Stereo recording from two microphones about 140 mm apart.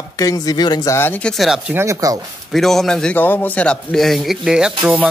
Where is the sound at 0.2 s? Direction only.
25° left (ahead or behind).